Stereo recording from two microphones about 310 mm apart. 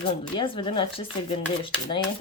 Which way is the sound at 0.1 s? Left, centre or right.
Centre.